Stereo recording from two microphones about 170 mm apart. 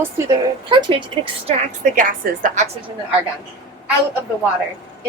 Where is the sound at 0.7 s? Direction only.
30° right (ahead or behind).